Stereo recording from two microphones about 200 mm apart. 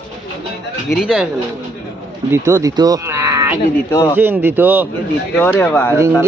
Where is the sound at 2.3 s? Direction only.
15° right (ahead or behind).